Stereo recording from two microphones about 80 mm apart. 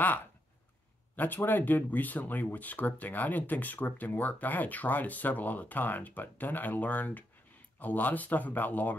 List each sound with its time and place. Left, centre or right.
1.1 s speech: left